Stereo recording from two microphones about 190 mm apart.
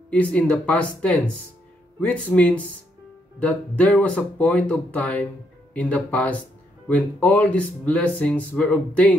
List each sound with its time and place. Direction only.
0.1 s speech: 5° left (ahead or behind)